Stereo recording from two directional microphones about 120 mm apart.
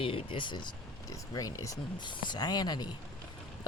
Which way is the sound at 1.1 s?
30° left (ahead or behind).